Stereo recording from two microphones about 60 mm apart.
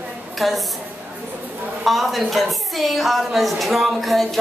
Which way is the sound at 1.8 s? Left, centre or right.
Centre.